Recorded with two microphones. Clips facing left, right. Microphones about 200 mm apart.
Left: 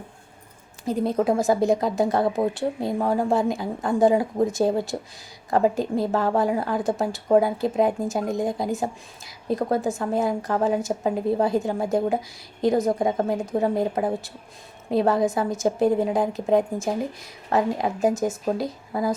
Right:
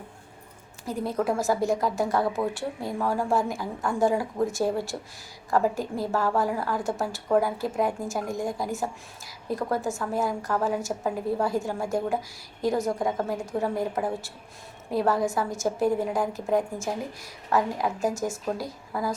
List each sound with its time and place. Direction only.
0.9 s a woman's voice: 20° left (ahead or behind)